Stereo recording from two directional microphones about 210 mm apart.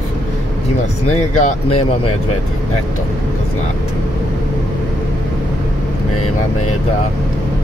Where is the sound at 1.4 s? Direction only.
30° left (ahead or behind).